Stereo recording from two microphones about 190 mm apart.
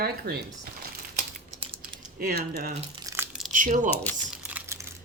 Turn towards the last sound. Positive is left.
turn(degrees=-10)  # may be behind; listen again after turning